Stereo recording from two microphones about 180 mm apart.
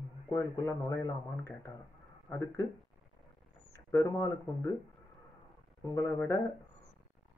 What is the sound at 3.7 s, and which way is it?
Speech, 15° left (ahead or behind).